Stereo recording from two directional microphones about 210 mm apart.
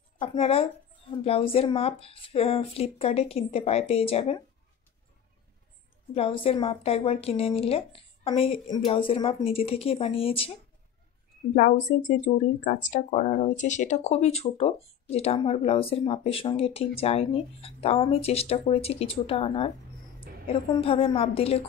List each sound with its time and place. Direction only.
0.2 s speech: 25° left (ahead or behind)
6.1 s speech: 25° left (ahead or behind)
11.5 s a woman's voice: 40° left (ahead or behind)